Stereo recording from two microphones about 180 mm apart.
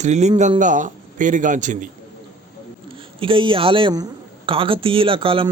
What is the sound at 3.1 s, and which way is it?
Speech, 30° right (ahead or behind).